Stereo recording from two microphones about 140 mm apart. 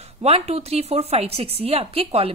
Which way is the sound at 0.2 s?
50° right (ahead or behind).